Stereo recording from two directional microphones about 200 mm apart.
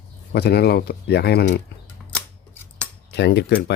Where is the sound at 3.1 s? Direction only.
55° left (ahead or behind).